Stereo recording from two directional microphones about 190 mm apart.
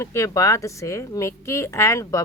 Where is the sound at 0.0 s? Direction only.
15° left (ahead or behind).